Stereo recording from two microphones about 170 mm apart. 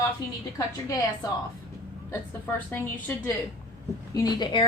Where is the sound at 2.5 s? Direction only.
15° left (ahead or behind).